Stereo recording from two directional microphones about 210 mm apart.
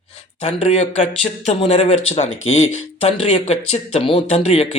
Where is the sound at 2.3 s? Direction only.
70° left (ahead or behind).